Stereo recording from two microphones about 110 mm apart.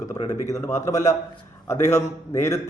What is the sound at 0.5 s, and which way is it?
A man's voice, 30° left (ahead or behind).